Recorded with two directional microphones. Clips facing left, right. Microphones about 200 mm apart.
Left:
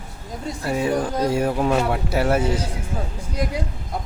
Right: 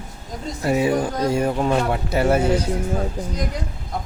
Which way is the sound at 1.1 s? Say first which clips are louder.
Even; 5° left (ahead or behind).